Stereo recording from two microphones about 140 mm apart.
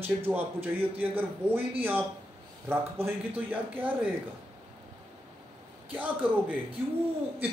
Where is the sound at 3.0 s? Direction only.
10° right (ahead or behind).